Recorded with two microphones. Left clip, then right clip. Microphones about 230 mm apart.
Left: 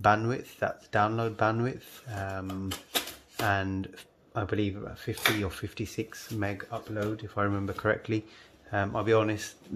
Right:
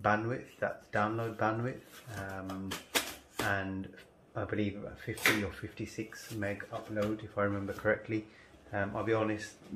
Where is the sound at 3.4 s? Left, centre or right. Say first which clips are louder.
Left 6 dB; left.